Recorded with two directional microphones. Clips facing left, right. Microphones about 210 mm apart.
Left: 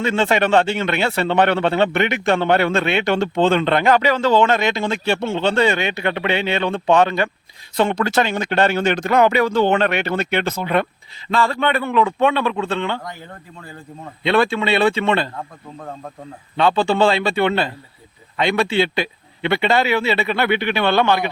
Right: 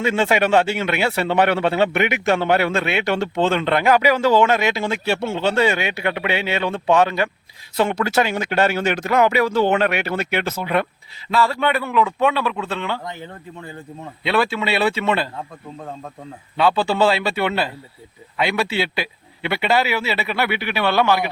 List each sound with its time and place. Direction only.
0.0 s a man's voice: 10° right (ahead or behind)
3.3 s speech: 30° left (ahead or behind)
3.6 s a man's voice: 5° right (ahead or behind)
14.3 s speech: 5° right (ahead or behind)
16.6 s a man's voice: 5° right (ahead or behind)